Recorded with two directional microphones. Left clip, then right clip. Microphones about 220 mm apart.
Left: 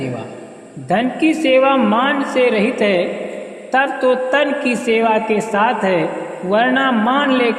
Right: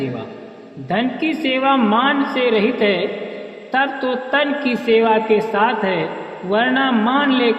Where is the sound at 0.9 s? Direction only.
40° left (ahead or behind).